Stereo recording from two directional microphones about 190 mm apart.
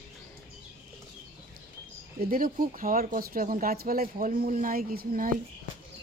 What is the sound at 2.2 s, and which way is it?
Speech, 50° right (ahead or behind).